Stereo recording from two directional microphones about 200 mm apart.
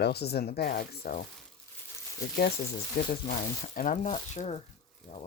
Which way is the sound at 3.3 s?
40° left (ahead or behind).